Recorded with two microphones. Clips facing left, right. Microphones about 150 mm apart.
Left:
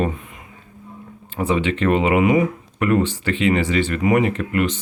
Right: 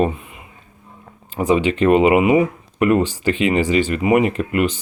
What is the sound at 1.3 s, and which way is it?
Speech, 15° right (ahead or behind).